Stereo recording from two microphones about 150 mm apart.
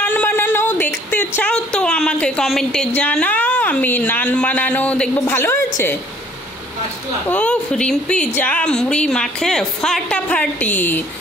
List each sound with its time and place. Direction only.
0.0 s a sound: 10° left (ahead or behind)
5.2 s a woman's voice: 15° left (ahead or behind)
7.2 s speech: 10° left (ahead or behind)